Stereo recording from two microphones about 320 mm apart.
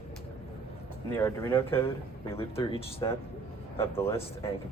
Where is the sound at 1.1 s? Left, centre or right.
Centre.